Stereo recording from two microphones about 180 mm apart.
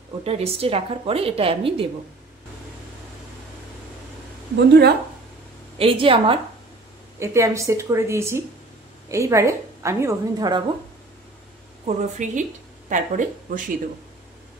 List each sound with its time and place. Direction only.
0.2 s a woman's voice: 35° right (ahead or behind)
4.6 s a woman's voice: 65° right (ahead or behind)
5.8 s a woman's voice: 30° right (ahead or behind)
7.2 s a woman's voice: 15° right (ahead or behind)
11.8 s a woman's voice: 45° right (ahead or behind)